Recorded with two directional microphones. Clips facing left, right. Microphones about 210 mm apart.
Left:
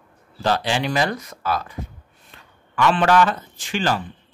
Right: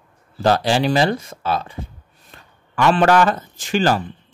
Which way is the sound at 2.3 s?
40° right (ahead or behind).